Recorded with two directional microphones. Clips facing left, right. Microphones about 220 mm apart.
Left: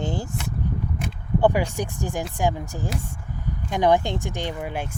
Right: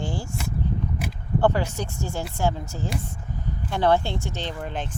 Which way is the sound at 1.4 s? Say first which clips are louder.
Left 2 dB; 15° left (ahead or behind).